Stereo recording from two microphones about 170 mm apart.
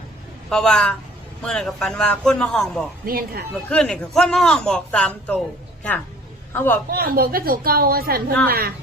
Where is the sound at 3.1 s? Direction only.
60° right (ahead or behind).